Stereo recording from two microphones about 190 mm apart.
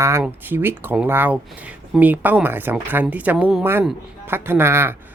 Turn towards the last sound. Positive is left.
turn(degrees=-10)  # may be behind; listen again after turning